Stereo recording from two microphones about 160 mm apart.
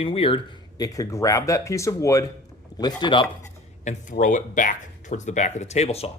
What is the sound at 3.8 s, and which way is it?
Speech, 50° left (ahead or behind).